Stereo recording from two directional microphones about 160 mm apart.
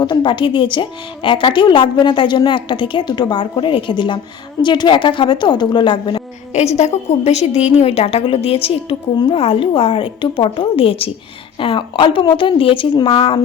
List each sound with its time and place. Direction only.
0.0 s a woman's voice: 25° left (ahead or behind)
6.5 s a woman's voice: 45° left (ahead or behind)